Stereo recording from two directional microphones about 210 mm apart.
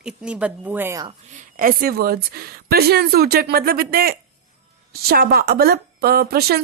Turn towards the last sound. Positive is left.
turn(degrees=-50)  # may be behind; listen again after turning